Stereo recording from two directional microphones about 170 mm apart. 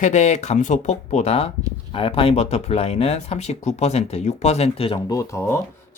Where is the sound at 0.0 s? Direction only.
45° left (ahead or behind).